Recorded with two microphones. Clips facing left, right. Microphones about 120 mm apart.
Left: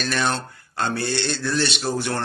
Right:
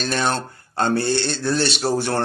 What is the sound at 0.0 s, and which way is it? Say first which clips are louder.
Speech: right 2 dB; 30° right (ahead or behind).